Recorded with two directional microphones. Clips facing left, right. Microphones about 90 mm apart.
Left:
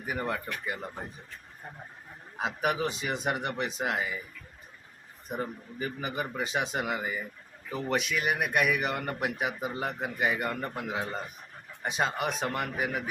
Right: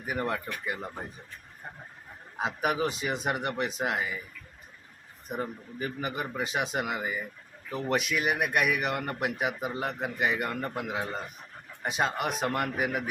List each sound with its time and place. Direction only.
0.0 s a man's voice: 5° right (ahead or behind)
0.4 s speech: 15° right (ahead or behind)
2.4 s a man's voice: 5° right (ahead or behind)
5.3 s a man's voice: centre (ahead or behind)